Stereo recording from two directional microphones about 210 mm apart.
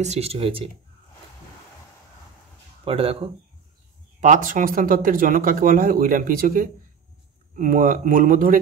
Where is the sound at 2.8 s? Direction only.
25° right (ahead or behind).